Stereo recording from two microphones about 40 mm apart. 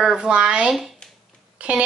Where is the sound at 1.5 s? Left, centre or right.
Right.